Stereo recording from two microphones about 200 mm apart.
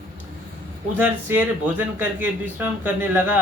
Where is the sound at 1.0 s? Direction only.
10° right (ahead or behind).